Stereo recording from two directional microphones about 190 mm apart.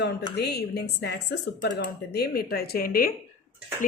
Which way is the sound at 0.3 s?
60° left (ahead or behind).